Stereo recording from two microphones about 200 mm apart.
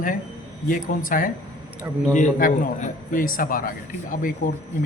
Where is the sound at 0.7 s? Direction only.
45° left (ahead or behind).